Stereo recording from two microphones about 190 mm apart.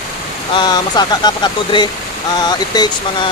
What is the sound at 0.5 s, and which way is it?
Speech, 20° left (ahead or behind).